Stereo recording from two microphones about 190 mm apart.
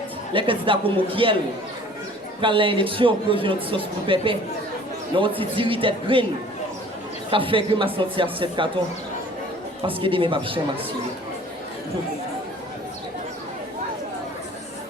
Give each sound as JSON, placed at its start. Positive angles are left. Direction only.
{"t": 0.3, "sound": "speech", "side_deg": -25}
{"t": 2.4, "sound": "speech", "side_deg": -25}
{"t": 7.3, "sound": "speech", "side_deg": -25}
{"t": 9.8, "sound": "speech", "side_deg": -30}